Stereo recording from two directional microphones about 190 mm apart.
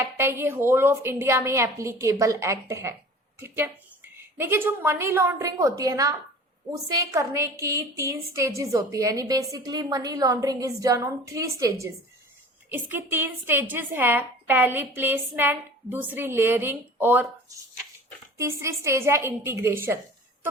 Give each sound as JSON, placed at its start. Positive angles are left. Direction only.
{"t": 0.0, "sound": "a woman's voice", "side_deg": -15}
{"t": 18.3, "sound": "a woman's voice", "side_deg": -15}